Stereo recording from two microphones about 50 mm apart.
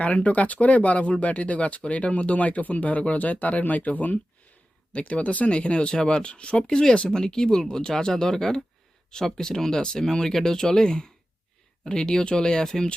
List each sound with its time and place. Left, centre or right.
0.0 s speech: left
12.1 s speech: centre